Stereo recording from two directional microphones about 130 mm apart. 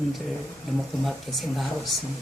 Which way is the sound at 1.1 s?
Centre (ahead or behind).